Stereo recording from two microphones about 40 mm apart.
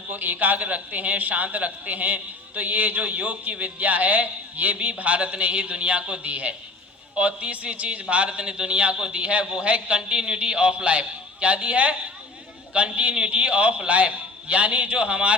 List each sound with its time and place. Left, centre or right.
0.1 s a man's voice: right